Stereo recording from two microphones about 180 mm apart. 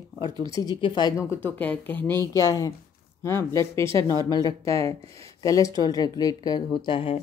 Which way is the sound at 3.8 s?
30° right (ahead or behind).